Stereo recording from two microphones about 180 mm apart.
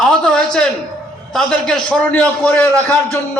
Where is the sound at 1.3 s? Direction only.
5° left (ahead or behind).